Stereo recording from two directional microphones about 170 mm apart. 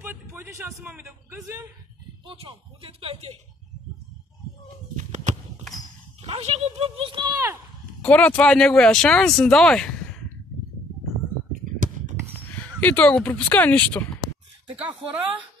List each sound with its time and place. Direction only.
0.0 s a sound: 10° right (ahead or behind)
0.8 s a man's voice: 15° right (ahead or behind)
2.2 s speech: 30° right (ahead or behind)
4.9 s a sound: 45° right (ahead or behind)
6.2 s speech: 35° right (ahead or behind); by 7.5 s 20° right (ahead or behind)
8.0 s speech: 10° left (ahead or behind)
12.8 s speech: 10° left (ahead or behind)
14.8 s a man's voice: 10° right (ahead or behind)